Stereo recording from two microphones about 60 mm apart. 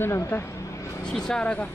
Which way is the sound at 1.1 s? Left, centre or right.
Centre.